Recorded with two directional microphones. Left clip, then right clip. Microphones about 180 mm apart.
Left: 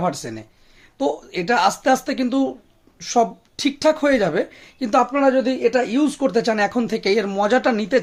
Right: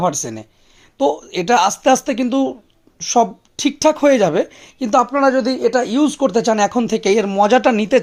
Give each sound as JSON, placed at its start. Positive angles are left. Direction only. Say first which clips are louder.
{"t": 0.0, "sound": "a woman's voice", "louder": "right 5 dB", "side_deg": -30}